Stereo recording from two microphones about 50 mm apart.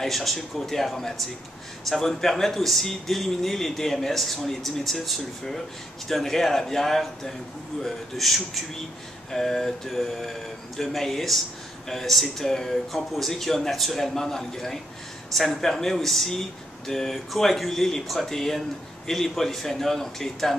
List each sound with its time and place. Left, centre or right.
0.0 s a man's voice: centre